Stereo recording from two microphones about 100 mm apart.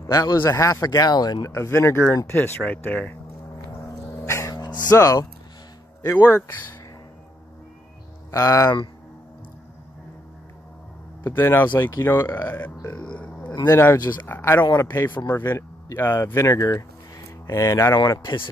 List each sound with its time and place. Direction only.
0.0 s speech: 35° left (ahead or behind); by 3.2 s 15° left (ahead or behind)
4.0 s dog: 30° left (ahead or behind)
6.0 s speech: 25° left (ahead or behind)
8.3 s speech: 35° left (ahead or behind)
11.2 s speech: 25° left (ahead or behind)
13.7 s speech: 25° left (ahead or behind)
16.7 s a sound: 30° left (ahead or behind)